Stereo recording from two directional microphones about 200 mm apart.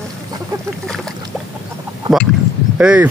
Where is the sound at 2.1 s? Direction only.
20° right (ahead or behind).